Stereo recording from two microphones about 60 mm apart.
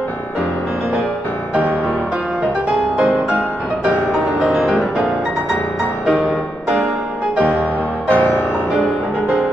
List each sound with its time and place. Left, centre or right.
4.4 s music: centre
8.1 s music: left